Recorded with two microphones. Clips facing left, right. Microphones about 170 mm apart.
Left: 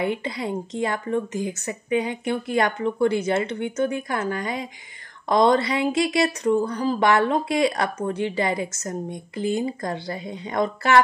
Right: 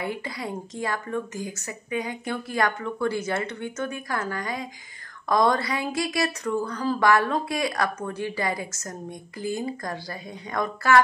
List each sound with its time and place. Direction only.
0.0 s speech: 25° left (ahead or behind)